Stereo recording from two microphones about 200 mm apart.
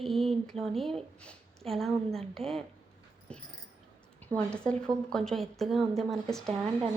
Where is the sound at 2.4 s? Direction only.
30° right (ahead or behind).